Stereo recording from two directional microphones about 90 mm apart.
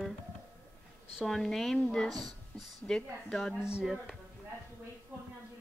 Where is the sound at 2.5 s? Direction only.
15° left (ahead or behind); by 4.1 s 5° right (ahead or behind).